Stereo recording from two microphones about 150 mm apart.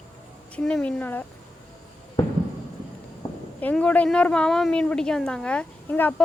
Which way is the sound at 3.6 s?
10° left (ahead or behind).